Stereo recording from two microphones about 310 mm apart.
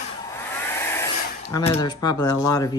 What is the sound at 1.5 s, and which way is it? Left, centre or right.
Speech, centre.